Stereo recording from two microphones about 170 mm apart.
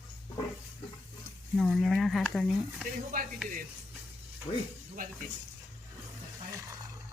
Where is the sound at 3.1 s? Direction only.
55° right (ahead or behind).